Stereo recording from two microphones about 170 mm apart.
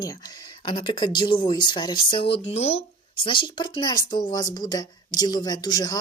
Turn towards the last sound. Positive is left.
turn(degrees=25)  # may be behind; listen again after turning